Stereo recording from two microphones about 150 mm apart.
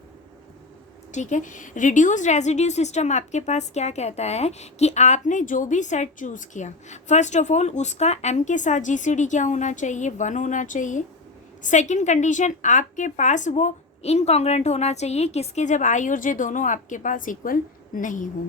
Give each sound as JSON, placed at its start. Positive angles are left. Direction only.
{"t": 1.1, "sound": "a woman's voice", "side_deg": 55}